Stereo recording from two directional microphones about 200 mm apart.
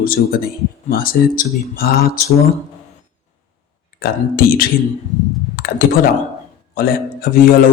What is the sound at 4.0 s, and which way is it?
Speech, 45° left (ahead or behind).